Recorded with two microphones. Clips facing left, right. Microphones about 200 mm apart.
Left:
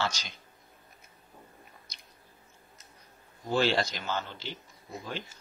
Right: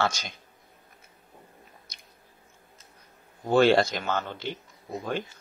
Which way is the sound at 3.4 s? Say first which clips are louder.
Right 7 dB; 50° right (ahead or behind).